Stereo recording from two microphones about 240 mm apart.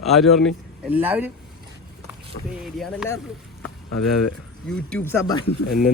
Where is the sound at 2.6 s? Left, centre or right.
Centre.